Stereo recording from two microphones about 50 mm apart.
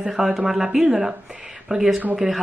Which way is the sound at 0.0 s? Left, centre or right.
Centre.